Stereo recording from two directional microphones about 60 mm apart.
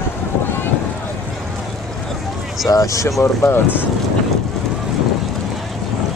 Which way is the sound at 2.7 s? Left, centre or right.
Left.